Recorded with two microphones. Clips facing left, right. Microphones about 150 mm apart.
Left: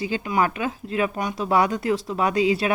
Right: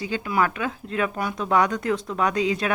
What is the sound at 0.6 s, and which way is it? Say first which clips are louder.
A woman's voice: left 2 dB; 5° left (ahead or behind).